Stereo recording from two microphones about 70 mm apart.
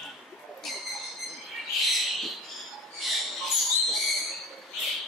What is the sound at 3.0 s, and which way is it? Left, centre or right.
Mouse, centre.